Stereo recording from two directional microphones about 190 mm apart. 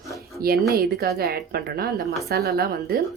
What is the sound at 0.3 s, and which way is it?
A woman's voice, 55° right (ahead or behind).